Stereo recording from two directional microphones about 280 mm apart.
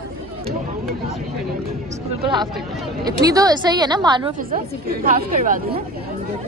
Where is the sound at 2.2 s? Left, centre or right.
Centre.